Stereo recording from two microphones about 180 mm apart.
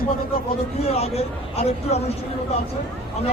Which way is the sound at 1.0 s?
35° left (ahead or behind).